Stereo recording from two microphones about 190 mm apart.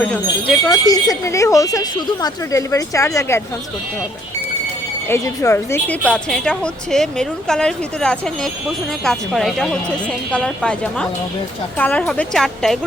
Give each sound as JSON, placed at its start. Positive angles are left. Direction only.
{"t": 0.0, "sound": "speech", "side_deg": 5}
{"t": 0.9, "sound": "speech", "side_deg": 20}
{"t": 5.0, "sound": "a woman's voice", "side_deg": 15}